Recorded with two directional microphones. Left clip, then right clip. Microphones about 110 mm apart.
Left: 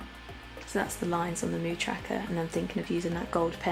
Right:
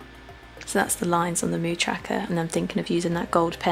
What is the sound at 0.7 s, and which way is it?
Speech, 65° right (ahead or behind).